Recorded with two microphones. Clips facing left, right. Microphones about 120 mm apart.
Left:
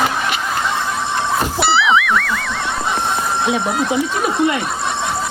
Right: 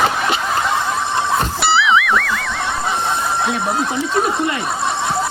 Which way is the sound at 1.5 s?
Centre (ahead or behind).